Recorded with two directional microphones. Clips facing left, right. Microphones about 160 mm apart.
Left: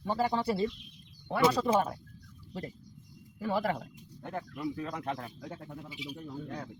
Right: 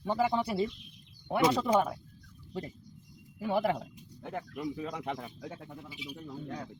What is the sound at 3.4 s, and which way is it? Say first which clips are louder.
Speech: right 2 dB; 15° right (ahead or behind).